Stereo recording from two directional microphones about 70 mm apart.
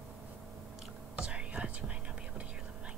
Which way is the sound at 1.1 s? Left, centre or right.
Centre.